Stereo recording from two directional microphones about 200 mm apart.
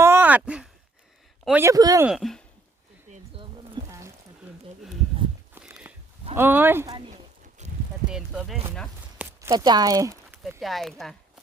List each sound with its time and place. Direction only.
0.0 s sigh: 10° right (ahead or behind)
1.5 s speech: 10° right (ahead or behind)
2.0 s speech: centre (ahead or behind)
3.1 s pigeon: 25° right (ahead or behind)
5.5 s walk: 5° right (ahead or behind)
6.3 s speech: 10° right (ahead or behind)
7.6 s a sound: 35° right (ahead or behind)
8.1 s speech: 5° right (ahead or behind)
9.1 s a sound: 15° right (ahead or behind)
10.6 s speech: centre (ahead or behind)